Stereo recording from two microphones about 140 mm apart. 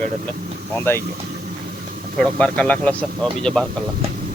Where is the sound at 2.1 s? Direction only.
10° left (ahead or behind).